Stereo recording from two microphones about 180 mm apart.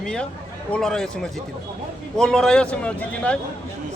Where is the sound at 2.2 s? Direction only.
5° left (ahead or behind).